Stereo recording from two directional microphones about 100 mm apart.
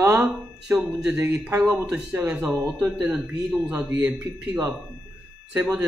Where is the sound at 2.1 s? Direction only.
20° right (ahead or behind).